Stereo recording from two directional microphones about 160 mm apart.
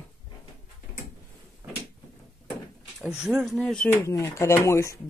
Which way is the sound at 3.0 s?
5° right (ahead or behind).